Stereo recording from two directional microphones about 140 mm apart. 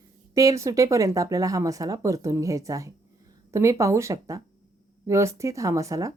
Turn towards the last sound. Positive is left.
turn(degrees=-25)  # may be behind; listen again after turning